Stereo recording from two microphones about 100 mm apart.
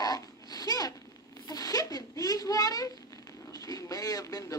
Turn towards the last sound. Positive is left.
turn(degrees=35)  # may be behind; listen again after turning